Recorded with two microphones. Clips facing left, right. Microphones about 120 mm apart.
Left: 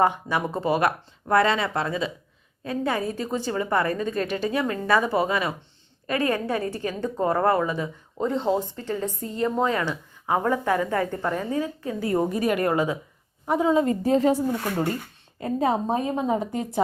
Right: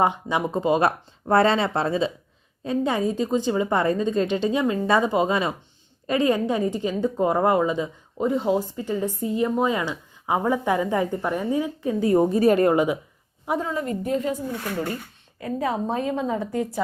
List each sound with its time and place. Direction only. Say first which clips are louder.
0.0 s a woman's voice: even; 20° right (ahead or behind)
13.6 s a woman's voice: left 6 dB; 20° left (ahead or behind)
15.4 s a woman's voice: left 2 dB; 30° left (ahead or behind)